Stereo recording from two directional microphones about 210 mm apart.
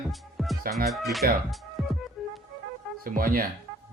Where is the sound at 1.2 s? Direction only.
45° right (ahead or behind).